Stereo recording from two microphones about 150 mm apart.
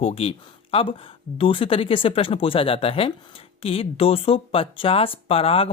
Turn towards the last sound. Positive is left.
turn(degrees=40)  # may be behind; listen again after turning